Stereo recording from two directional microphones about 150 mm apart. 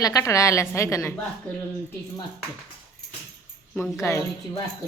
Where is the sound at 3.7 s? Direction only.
20° left (ahead or behind).